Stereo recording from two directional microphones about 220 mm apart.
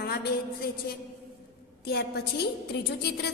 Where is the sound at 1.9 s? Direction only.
45° left (ahead or behind).